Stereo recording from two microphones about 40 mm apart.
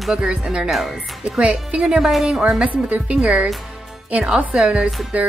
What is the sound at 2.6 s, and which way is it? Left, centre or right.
Speech, right.